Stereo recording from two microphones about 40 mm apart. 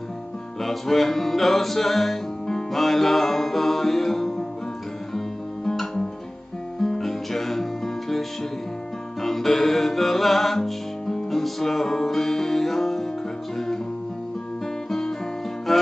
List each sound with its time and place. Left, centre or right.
0.6 s music: centre
5.7 s guitar: centre
6.8 s music: centre
14.9 s music: centre